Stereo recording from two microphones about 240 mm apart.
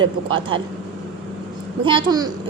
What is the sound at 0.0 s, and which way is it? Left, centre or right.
Speech, right.